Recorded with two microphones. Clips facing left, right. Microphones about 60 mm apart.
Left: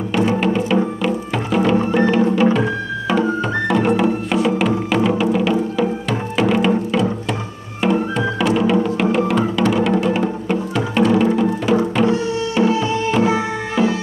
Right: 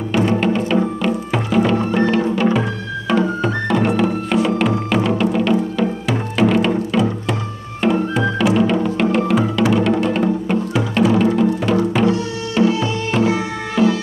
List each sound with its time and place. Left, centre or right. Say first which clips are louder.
0.4 s music: even; centre
7.8 s music: right 1 dB; centre
12.6 s music: right 1 dB; left
13.8 s music: right 2 dB; centre